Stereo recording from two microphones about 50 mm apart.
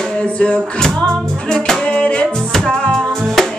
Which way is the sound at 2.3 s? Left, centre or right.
Centre.